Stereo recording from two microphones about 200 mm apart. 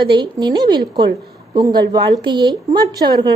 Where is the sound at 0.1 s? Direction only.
25° right (ahead or behind).